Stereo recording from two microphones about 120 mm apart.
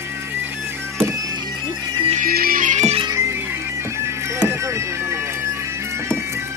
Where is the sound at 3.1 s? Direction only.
20° right (ahead or behind).